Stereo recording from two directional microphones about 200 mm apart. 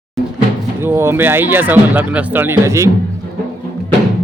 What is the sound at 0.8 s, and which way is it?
Speech, 10° right (ahead or behind).